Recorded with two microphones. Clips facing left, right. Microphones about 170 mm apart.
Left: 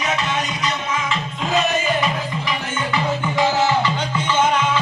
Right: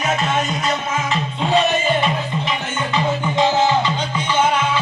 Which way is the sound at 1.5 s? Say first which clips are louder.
Right 2 dB; 30° right (ahead or behind).